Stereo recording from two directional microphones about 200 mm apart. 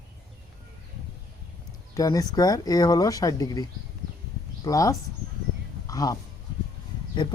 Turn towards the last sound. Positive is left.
turn(degrees=20)  # may be behind; listen again after turning